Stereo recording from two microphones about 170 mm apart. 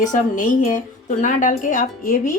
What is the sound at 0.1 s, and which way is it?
A woman's voice, 50° left (ahead or behind).